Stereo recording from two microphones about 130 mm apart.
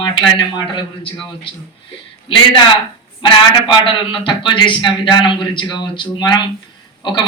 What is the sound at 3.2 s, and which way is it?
A man's voice, 40° left (ahead or behind).